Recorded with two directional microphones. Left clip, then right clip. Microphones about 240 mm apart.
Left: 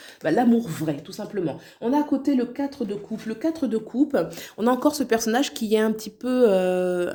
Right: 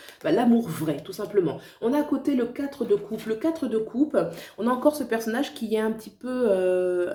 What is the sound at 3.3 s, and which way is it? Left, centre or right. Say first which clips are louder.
Speech: even; left.